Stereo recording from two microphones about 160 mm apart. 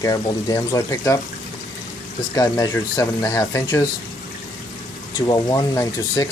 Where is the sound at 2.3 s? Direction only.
20° left (ahead or behind).